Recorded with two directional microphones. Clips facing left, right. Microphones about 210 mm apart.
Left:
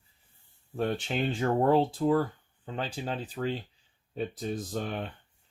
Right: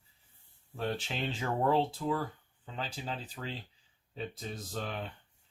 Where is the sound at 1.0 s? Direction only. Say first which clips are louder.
Left 7 dB; 50° left (ahead or behind).